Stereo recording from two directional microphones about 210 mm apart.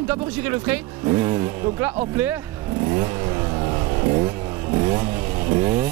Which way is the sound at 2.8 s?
15° right (ahead or behind).